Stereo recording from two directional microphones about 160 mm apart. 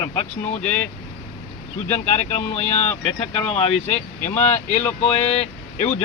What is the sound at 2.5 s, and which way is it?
Speech, 45° left (ahead or behind).